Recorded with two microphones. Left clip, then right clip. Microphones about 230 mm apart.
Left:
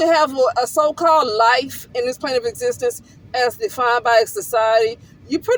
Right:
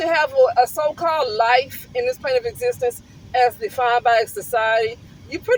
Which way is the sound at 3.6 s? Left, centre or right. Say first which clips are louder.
Left 1 dB; left.